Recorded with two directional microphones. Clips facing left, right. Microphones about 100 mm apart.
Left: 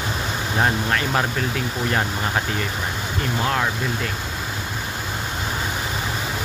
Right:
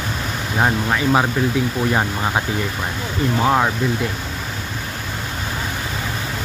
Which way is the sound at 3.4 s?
25° right (ahead or behind).